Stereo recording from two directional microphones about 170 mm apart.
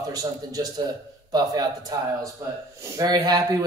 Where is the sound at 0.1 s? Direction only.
20° right (ahead or behind).